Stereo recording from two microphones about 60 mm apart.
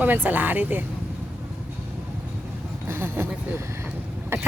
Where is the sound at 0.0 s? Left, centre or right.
Right.